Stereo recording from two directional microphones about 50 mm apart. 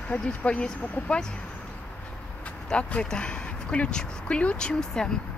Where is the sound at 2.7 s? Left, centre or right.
Left.